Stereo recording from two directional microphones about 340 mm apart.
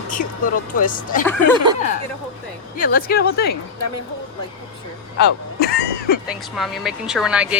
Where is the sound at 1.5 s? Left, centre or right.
Centre.